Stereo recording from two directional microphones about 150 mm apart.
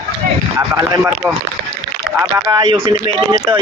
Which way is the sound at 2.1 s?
20° right (ahead or behind).